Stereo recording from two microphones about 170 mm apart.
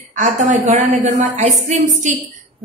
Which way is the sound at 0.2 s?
45° right (ahead or behind).